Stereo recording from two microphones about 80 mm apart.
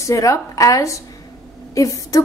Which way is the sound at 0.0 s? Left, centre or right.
Left.